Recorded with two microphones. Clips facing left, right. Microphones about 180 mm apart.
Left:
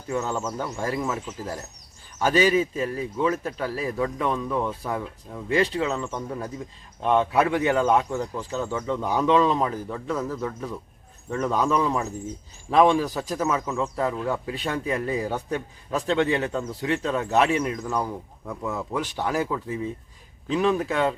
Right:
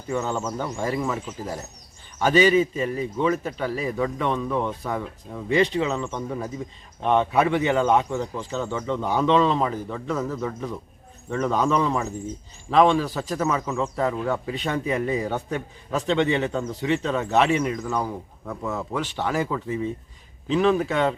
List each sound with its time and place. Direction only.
0.1 s speech: 5° left (ahead or behind)
0.7 s speech: 10° right (ahead or behind)
0.9 s speech: centre (ahead or behind)